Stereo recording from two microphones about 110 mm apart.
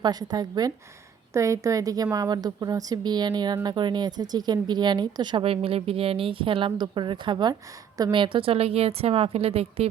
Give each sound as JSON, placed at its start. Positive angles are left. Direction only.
{"t": 0.0, "sound": "a woman's voice", "side_deg": -40}